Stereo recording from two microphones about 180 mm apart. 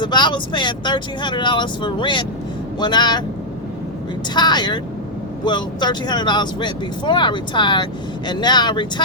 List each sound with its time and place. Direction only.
0.0 s speech: 25° left (ahead or behind)
4.4 s speech: 25° left (ahead or behind)